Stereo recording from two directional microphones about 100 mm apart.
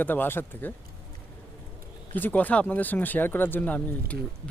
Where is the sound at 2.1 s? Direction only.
15° left (ahead or behind).